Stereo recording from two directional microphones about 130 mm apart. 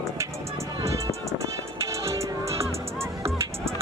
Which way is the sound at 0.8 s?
25° right (ahead or behind).